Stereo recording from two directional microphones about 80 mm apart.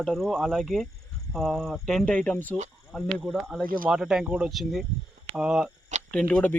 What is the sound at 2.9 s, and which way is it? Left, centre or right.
Speech, centre.